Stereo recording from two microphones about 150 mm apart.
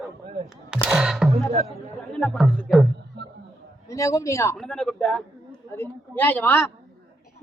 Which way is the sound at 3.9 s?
20° left (ahead or behind).